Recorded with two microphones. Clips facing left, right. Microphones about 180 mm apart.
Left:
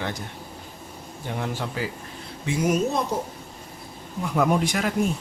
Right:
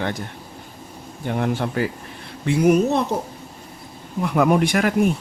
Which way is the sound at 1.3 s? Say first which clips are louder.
Right 7 dB; 55° right (ahead or behind).